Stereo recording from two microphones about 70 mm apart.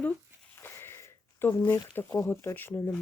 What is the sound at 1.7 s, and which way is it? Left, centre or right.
Speech, left.